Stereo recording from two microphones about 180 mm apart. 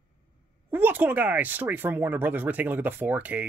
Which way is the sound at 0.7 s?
10° right (ahead or behind).